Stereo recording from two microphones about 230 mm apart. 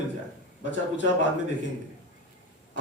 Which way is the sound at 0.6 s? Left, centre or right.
Left.